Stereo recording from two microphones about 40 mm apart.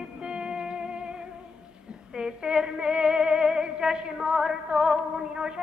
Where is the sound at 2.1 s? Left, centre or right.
Right.